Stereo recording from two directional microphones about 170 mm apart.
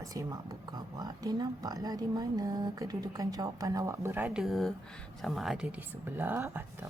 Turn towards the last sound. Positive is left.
turn(degrees=-15)  # may be behind; listen again after turning